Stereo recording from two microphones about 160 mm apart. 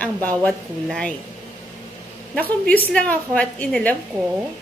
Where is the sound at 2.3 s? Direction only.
10° left (ahead or behind).